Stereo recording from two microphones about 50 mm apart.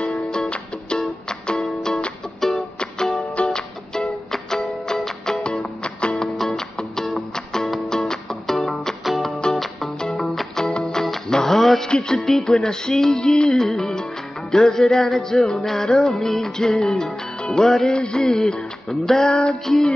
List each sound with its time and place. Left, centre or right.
0.0 s music: left
0.9 s music: centre
3.4 s music: centre
6.3 s music: centre
9.0 s music: centre
17.9 s music: centre
18.2 s music: centre